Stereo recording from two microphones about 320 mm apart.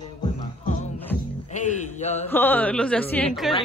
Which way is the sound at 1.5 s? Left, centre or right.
Left.